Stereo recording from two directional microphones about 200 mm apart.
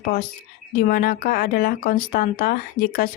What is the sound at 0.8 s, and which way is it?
Speech, 50° left (ahead or behind).